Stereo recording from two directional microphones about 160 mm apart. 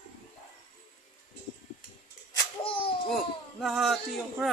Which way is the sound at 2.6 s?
35° left (ahead or behind).